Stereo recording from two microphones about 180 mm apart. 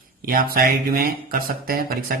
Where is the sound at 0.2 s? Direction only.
55° right (ahead or behind).